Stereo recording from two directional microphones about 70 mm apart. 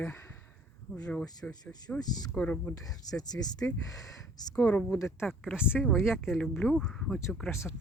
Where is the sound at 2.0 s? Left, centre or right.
Left.